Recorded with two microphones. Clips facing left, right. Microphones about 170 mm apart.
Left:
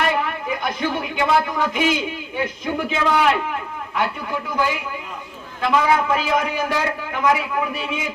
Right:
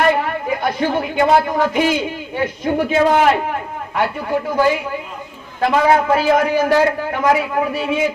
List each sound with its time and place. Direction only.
0.1 s a woman's voice: 45° right (ahead or behind)
5.5 s a man's voice: 45° right (ahead or behind)